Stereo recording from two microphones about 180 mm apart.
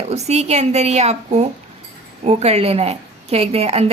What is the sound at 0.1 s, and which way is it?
A woman's voice, 40° right (ahead or behind).